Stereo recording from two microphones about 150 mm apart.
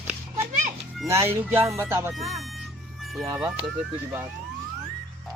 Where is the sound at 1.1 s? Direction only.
15° right (ahead or behind).